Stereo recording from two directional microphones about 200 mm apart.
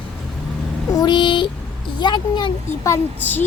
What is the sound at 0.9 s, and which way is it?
A woman's voice, 20° left (ahead or behind).